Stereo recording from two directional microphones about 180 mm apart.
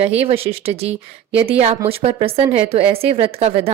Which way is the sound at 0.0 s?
35° right (ahead or behind).